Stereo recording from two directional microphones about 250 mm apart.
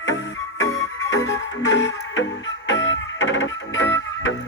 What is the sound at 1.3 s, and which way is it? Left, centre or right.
Music, left.